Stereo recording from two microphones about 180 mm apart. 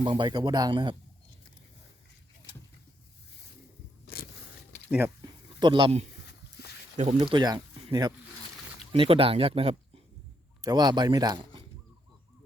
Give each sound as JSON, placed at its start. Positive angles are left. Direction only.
{"t": 0.0, "sound": "speech", "side_deg": -25}
{"t": 4.0, "sound": "a sound", "side_deg": 55}
{"t": 4.9, "sound": "speech", "side_deg": -10}
{"t": 5.2, "sound": "a sound", "side_deg": -25}
{"t": 6.9, "sound": "speech", "side_deg": -40}
{"t": 7.2, "sound": "speech", "side_deg": -25}
{"t": 10.6, "sound": "speech", "side_deg": -20}